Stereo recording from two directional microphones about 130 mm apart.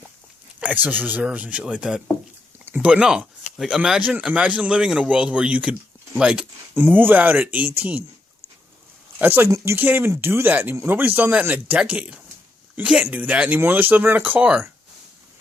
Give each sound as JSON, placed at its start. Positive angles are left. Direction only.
{"t": 0.6, "sound": "speech", "side_deg": -10}
{"t": 9.2, "sound": "speech", "side_deg": -15}